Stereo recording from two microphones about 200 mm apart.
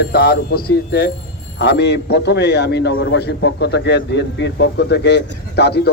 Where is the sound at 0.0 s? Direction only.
50° left (ahead or behind).